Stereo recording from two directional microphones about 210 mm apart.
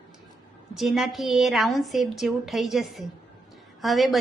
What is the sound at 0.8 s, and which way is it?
A woman's voice, centre (ahead or behind).